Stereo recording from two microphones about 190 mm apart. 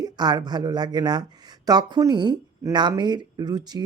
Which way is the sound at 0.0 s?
20° right (ahead or behind).